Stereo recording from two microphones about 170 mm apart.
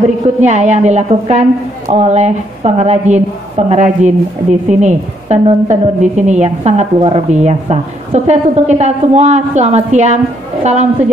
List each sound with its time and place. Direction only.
0.4 s a woman's voice: 45° right (ahead or behind)